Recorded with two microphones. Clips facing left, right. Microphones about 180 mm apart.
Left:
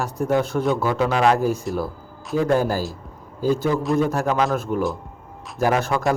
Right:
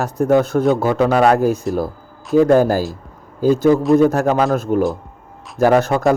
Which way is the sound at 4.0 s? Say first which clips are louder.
Right 6 dB; 45° right (ahead or behind).